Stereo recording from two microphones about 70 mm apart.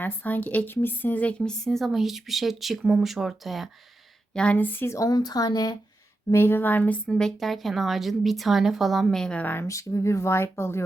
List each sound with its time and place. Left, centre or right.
0.0 s a woman's voice: left; by 3.7 s centre
4.5 s speech: left
4.9 s speech: left
5.1 s a woman's voice: left
6.3 s speech: left
7.1 s a woman's voice: centre
9.4 s speech: left
9.6 s speech: left